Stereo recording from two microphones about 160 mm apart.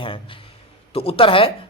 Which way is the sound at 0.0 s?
35° left (ahead or behind).